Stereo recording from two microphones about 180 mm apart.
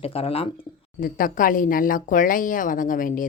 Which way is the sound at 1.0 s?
50° left (ahead or behind).